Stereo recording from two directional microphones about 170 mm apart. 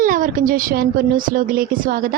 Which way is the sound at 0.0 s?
55° right (ahead or behind).